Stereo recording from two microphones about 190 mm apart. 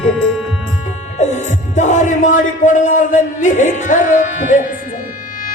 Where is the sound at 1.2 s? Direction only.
40° left (ahead or behind).